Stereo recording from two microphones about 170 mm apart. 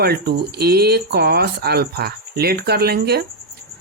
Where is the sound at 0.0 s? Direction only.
70° right (ahead or behind).